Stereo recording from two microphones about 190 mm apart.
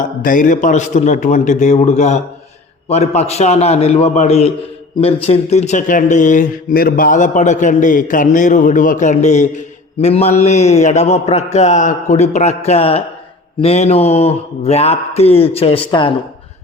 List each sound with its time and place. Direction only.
0.0 s speech: 45° left (ahead or behind); by 16.1 s 25° left (ahead or behind)